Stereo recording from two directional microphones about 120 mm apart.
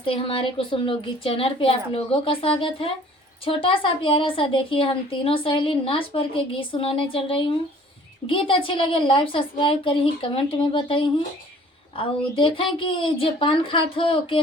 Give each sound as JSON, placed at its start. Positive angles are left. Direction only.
{"t": 0.0, "sound": "a woman's voice", "side_deg": 50}